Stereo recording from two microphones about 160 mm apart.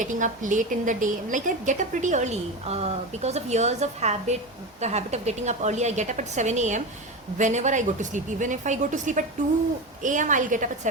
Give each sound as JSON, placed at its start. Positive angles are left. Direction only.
{"t": 0.0, "sound": "a woman's voice", "side_deg": -50}